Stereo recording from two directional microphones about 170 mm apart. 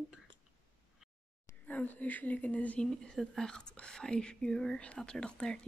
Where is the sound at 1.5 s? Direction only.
10° left (ahead or behind).